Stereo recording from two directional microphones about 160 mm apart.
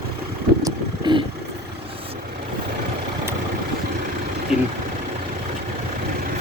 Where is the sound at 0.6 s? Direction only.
30° right (ahead or behind).